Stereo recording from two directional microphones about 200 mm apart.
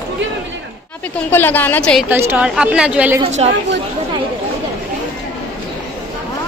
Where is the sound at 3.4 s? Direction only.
30° right (ahead or behind).